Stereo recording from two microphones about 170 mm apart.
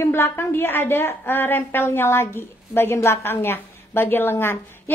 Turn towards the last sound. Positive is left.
turn(degrees=15)  # may be behind; listen again after turning